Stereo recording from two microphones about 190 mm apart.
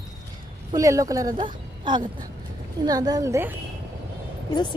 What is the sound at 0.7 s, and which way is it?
Speech, 15° right (ahead or behind).